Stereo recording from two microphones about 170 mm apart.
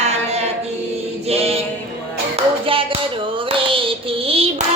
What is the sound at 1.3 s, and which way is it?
Music, 35° right (ahead or behind).